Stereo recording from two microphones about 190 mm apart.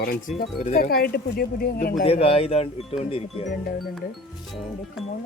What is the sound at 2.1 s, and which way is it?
Speech, 30° left (ahead or behind).